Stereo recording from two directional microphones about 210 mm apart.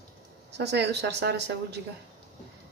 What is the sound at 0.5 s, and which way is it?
Speech, 55° right (ahead or behind).